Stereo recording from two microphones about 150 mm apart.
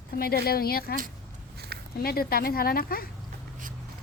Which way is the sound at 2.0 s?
90° left.